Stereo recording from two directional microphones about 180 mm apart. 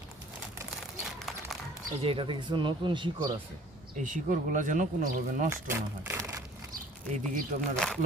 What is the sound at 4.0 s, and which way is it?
Speech, 45° right (ahead or behind).